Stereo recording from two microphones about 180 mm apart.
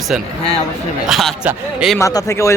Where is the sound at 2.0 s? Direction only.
15° left (ahead or behind).